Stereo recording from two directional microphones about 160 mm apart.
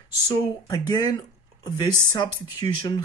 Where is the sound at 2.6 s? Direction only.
25° left (ahead or behind).